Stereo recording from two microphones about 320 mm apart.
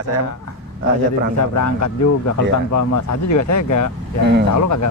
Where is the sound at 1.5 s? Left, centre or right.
Left.